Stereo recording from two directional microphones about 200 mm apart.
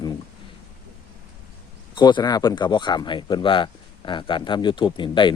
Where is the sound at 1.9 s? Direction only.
20° left (ahead or behind).